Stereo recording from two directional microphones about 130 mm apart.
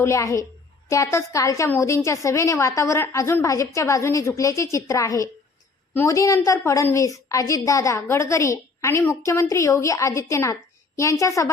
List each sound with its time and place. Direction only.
0.0 s a woman's voice: 20° left (ahead or behind)
6.1 s a woman's voice: 25° left (ahead or behind)